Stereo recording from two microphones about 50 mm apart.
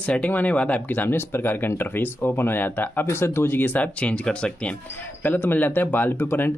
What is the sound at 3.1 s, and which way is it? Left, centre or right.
Speech, left.